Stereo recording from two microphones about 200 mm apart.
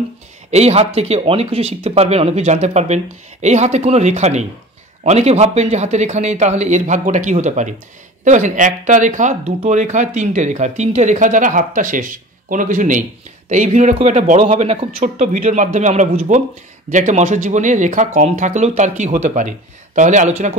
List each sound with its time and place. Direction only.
0.5 s speech: 30° right (ahead or behind)